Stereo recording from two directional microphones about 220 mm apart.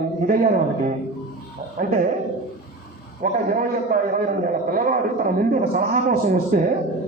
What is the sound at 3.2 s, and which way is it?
A man's voice, 40° right (ahead or behind).